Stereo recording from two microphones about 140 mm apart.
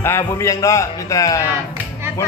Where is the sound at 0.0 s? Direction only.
20° left (ahead or behind).